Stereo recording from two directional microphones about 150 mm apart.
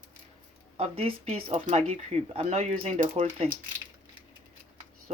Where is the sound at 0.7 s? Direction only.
40° right (ahead or behind).